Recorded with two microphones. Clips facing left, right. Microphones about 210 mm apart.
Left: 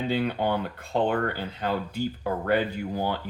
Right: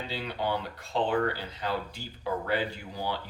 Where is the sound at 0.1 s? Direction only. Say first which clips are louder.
Left 5 dB; 55° left (ahead or behind).